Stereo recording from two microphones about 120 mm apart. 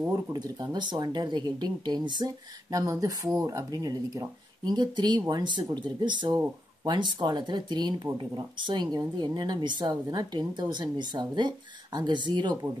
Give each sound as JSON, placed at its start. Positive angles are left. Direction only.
{"t": 0.1, "sound": "speech", "side_deg": -35}